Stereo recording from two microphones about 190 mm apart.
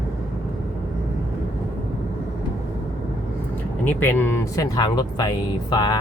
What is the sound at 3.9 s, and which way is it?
Speech, 10° left (ahead or behind).